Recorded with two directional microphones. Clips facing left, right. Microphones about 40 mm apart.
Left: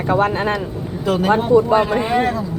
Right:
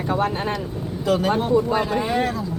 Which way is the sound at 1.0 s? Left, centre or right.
Left.